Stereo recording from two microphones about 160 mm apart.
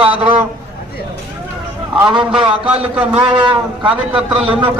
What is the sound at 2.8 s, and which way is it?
Speech, 40° right (ahead or behind).